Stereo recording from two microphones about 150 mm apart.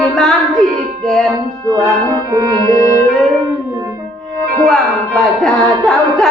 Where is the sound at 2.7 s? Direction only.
20° left (ahead or behind).